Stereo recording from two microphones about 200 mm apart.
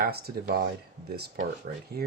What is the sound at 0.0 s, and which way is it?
Speech, 50° right (ahead or behind).